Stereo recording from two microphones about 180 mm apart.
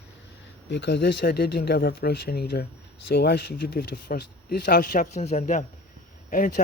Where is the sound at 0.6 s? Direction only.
75° left (ahead or behind).